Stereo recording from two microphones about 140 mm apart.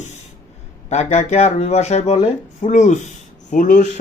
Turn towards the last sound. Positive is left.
turn(degrees=70)  # may be behind; listen again after turning